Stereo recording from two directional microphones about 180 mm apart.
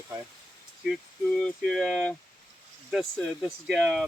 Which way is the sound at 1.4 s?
Centre (ahead or behind).